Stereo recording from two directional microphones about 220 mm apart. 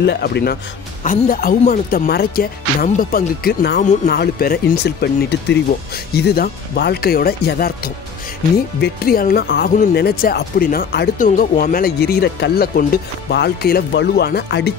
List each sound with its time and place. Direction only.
0.0 s speech: 50° left (ahead or behind)